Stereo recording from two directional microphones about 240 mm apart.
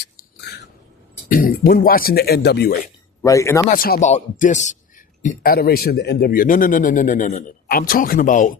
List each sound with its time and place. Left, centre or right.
0.0 s a sound: left
1.3 s a man's voice: left
3.2 s speech: centre
3.7 s a man's voice: left